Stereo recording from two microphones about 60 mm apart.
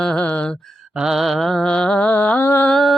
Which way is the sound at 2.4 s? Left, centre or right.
Left.